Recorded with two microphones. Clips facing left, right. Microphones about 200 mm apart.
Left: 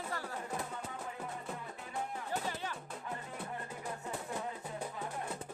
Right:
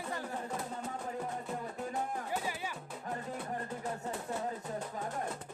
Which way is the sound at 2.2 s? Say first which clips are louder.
Right 1 dB; 10° right (ahead or behind).